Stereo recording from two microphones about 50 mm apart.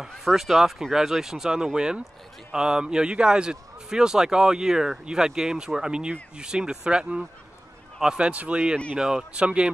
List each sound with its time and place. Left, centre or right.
0.2 s a man's voice: centre
8.3 s speech: right